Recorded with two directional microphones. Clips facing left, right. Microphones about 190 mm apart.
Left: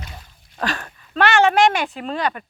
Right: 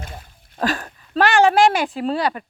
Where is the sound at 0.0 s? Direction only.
50° right (ahead or behind).